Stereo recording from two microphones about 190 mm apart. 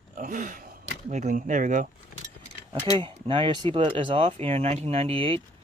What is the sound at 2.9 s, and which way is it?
Speech, 25° right (ahead or behind).